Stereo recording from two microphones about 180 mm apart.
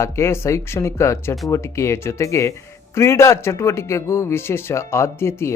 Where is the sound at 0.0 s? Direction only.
15° left (ahead or behind).